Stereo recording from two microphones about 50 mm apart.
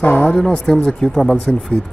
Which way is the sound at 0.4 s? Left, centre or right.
Centre.